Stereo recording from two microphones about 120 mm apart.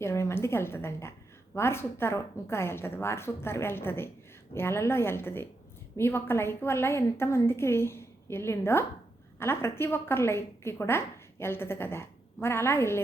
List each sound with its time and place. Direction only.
0.0 s a woman's voice: 20° left (ahead or behind)